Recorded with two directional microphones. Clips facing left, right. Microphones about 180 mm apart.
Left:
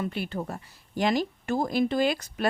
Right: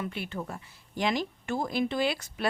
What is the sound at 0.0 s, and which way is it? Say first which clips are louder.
A woman's voice: left 4 dB; 35° left (ahead or behind).